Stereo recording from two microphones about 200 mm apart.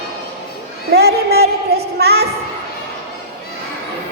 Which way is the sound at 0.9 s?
55° right (ahead or behind).